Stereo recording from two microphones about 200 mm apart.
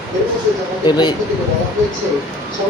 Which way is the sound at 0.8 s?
20° left (ahead or behind).